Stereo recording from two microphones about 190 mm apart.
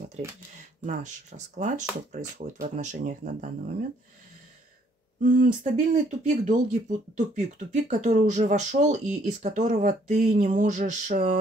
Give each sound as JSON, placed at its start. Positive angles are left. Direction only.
{"t": 0.8, "sound": "speech", "side_deg": -40}
{"t": 5.2, "sound": "speech", "side_deg": -45}